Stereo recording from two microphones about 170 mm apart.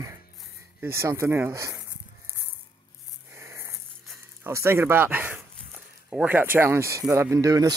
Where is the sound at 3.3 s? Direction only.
15° right (ahead or behind).